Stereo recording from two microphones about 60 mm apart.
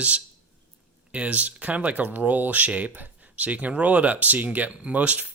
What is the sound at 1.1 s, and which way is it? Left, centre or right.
Speech, right.